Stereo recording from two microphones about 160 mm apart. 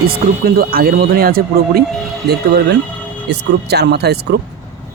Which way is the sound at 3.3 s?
90° right.